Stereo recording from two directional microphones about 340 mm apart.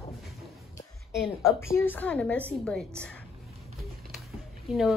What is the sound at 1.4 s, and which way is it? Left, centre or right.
A woman's voice, centre.